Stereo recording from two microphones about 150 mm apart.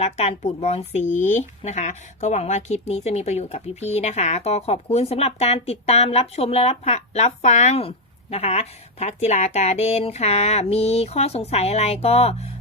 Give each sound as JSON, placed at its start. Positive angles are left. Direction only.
{"t": 0.0, "sound": "speech", "side_deg": 45}